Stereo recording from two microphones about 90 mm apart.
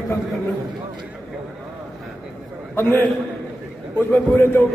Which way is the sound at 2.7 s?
20° left (ahead or behind).